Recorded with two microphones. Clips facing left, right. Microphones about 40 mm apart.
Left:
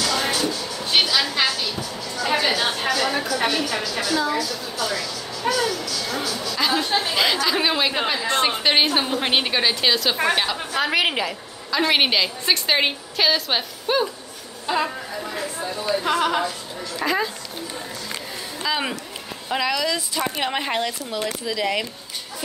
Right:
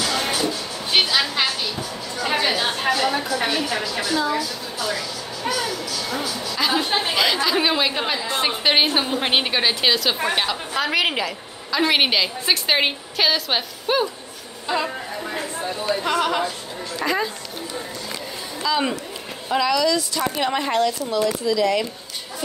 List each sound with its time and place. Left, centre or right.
0.0 s music: centre
0.5 s a sound: centre
3.6 s speech: centre
6.9 s speech: right
7.4 s a woman's voice: centre
15.2 s speech: centre
16.1 s a woman's voice: centre
18.6 s a woman's voice: centre